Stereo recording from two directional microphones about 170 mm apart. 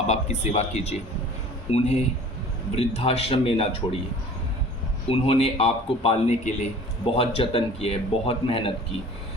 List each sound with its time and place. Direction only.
0.1 s a man's voice: 40° left (ahead or behind)
5.0 s a man's voice: 35° left (ahead or behind)